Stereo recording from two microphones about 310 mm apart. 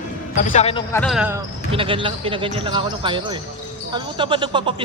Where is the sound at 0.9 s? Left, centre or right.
Centre.